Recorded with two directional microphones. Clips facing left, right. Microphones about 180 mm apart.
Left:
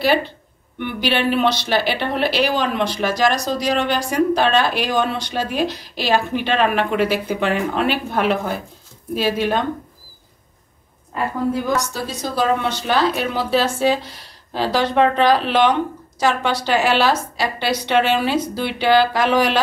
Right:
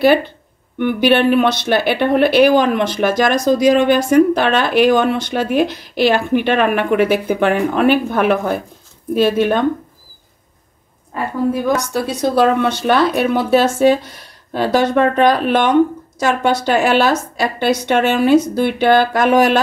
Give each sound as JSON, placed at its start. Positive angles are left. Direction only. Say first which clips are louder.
{"t": 0.7, "sound": "a woman's voice", "louder": "right 8 dB", "side_deg": -50}
{"t": 11.7, "sound": "a woman's voice", "louder": "right 5 dB", "side_deg": -55}